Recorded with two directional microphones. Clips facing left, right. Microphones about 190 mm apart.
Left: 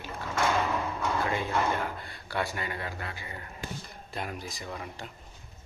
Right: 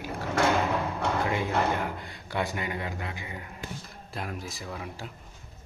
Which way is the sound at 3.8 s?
Centre (ahead or behind).